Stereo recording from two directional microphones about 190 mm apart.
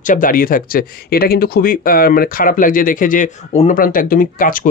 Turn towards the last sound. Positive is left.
turn(degrees=45)  # may be behind; listen again after turning